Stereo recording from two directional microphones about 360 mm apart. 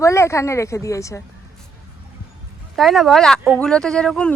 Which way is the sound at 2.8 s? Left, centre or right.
Centre.